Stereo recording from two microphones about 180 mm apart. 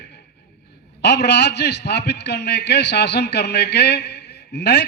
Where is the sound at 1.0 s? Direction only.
70° left (ahead or behind).